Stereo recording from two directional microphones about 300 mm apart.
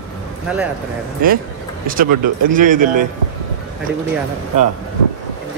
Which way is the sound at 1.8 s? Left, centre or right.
Right.